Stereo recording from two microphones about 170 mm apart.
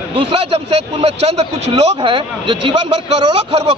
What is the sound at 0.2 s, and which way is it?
A man's voice, 35° right (ahead or behind).